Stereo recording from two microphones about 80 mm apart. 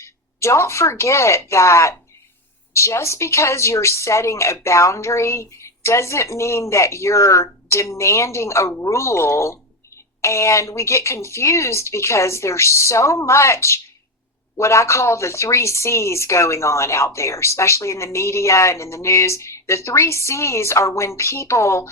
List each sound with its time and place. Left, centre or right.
0.0 s speech: left